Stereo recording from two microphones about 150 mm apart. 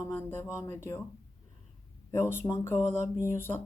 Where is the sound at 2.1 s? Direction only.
15° left (ahead or behind).